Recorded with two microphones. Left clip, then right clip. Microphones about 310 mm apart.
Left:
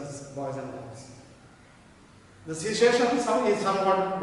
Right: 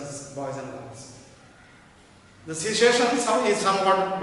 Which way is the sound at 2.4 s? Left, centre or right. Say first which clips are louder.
Right 2 dB; centre.